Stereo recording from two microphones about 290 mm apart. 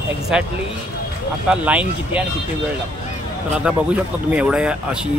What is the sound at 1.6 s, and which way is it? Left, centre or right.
Speech, centre.